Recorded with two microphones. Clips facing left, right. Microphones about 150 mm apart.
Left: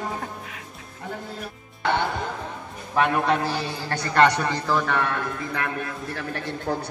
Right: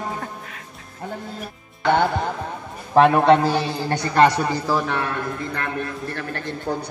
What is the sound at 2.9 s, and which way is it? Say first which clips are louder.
Speech: right 7 dB; 40° right (ahead or behind).